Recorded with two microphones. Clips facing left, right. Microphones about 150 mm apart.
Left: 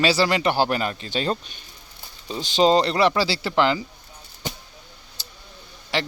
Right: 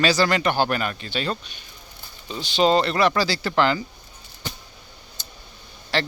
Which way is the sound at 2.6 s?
30° left (ahead or behind).